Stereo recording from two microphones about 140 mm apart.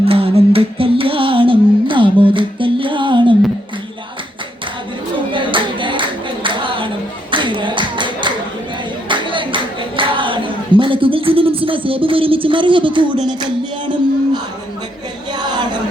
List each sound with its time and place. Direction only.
0.0 s music: 45° right (ahead or behind)
5.3 s clapping: 35° right (ahead or behind)
10.0 s a sound: 35° right (ahead or behind)